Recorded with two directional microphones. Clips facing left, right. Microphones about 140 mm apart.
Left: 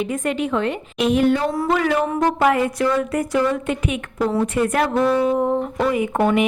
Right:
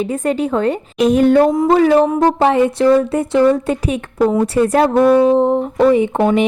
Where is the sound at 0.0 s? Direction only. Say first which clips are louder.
Right 5 dB; 35° right (ahead or behind).